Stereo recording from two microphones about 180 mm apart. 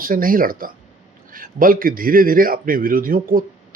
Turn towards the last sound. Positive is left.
turn(degrees=-50)  # may be behind; listen again after turning